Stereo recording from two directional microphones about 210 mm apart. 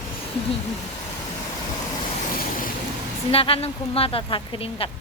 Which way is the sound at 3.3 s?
25° left (ahead or behind).